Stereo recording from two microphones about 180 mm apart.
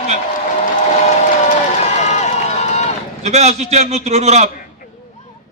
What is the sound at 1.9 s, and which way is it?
Run, 40° left (ahead or behind).